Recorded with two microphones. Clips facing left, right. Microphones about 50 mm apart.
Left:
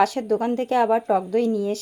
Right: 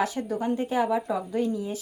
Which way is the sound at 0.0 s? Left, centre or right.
Left.